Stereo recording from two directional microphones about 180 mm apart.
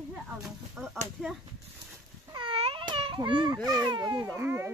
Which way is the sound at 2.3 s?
25° right (ahead or behind).